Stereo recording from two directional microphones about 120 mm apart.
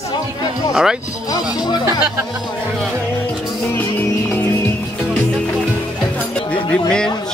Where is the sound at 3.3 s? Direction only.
Centre (ahead or behind).